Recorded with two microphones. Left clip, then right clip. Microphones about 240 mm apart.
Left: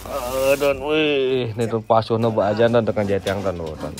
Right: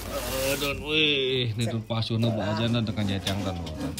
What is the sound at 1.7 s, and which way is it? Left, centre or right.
Speech, centre.